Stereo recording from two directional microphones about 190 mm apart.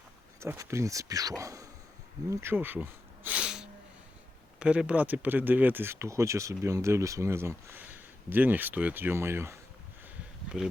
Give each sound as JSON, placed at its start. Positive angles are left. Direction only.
{"t": 0.3, "sound": "speech", "side_deg": -15}
{"t": 2.3, "sound": "a sound", "side_deg": -10}
{"t": 4.6, "sound": "speech", "side_deg": -5}